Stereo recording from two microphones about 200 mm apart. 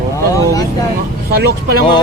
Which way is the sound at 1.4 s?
50° right (ahead or behind).